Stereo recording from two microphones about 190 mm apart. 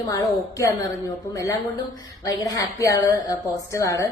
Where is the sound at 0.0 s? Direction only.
20° left (ahead or behind).